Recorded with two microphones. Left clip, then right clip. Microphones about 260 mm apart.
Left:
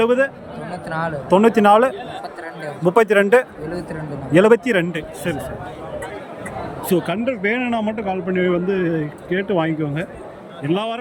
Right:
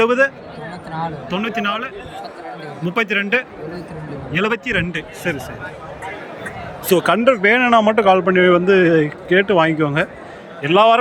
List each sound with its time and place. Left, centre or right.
0.0 s a man's voice: centre
0.9 s a man's voice: left
6.8 s speech: centre